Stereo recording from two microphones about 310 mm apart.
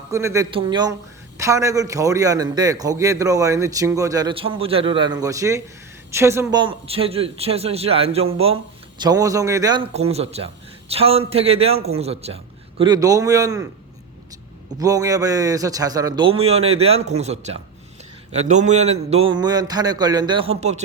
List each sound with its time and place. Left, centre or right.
0.1 s a man's voice: centre
14.8 s a man's voice: centre